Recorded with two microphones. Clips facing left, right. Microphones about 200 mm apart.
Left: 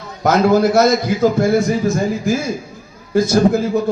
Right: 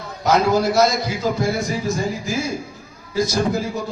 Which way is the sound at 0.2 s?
55° left (ahead or behind).